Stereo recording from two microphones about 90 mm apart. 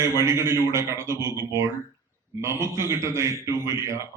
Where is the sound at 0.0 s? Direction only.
30° right (ahead or behind).